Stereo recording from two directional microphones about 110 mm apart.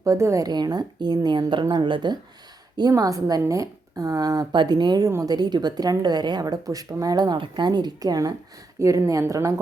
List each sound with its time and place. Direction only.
0.0 s a woman's voice: 25° right (ahead or behind)